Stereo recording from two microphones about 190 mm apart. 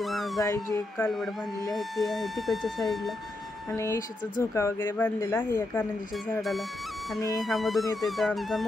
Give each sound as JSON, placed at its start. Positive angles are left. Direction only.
{"t": 0.0, "sound": "dog", "side_deg": 0}
{"t": 0.4, "sound": "speech", "side_deg": 15}
{"t": 1.7, "sound": "speech", "side_deg": 0}
{"t": 3.7, "sound": "speech", "side_deg": 15}
{"t": 6.3, "sound": "speech", "side_deg": 0}
{"t": 7.2, "sound": "music", "side_deg": 20}
{"t": 7.4, "sound": "speech", "side_deg": 0}